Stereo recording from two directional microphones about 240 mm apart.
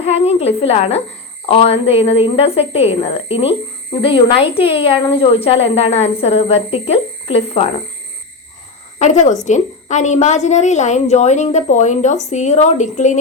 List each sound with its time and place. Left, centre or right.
0.0 s a woman's voice: left
9.0 s a woman's voice: left